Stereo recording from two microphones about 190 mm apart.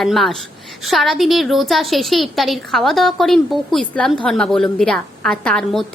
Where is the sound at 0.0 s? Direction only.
Centre (ahead or behind).